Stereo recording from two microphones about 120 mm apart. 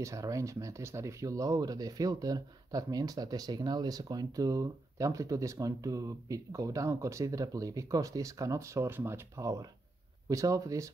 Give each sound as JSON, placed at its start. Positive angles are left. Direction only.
{"t": 0.0, "sound": "speech", "side_deg": -25}